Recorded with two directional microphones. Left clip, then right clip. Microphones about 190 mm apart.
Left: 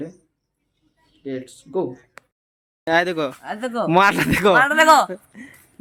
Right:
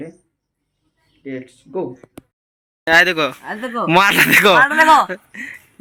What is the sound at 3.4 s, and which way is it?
Speech, 20° left (ahead or behind).